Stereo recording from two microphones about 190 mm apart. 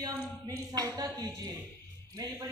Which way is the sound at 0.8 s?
15° right (ahead or behind).